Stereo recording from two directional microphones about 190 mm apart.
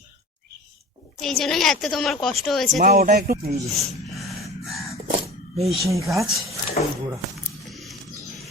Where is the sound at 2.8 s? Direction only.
50° right (ahead or behind).